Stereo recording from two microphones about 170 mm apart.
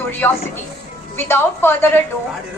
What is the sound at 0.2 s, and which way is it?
A woman's voice, 10° left (ahead or behind).